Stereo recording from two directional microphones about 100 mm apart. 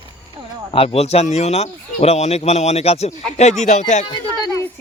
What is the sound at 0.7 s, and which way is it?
Speech, 75° left (ahead or behind).